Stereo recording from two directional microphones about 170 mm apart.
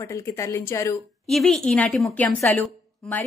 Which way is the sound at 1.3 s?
Centre (ahead or behind).